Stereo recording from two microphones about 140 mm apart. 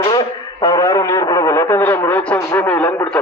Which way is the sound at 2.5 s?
10° left (ahead or behind).